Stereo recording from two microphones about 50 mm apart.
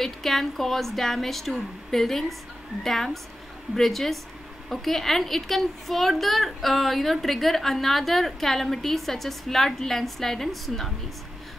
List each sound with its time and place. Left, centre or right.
0.0 s a woman's voice: centre